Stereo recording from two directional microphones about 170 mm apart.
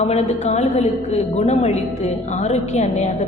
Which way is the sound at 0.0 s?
40° left (ahead or behind).